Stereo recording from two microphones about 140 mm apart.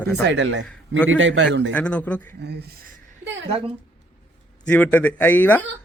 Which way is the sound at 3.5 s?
40° right (ahead or behind).